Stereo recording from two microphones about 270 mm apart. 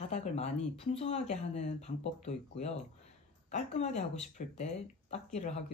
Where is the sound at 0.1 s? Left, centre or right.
Left.